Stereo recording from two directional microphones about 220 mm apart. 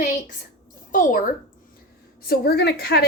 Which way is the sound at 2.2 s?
45° left (ahead or behind).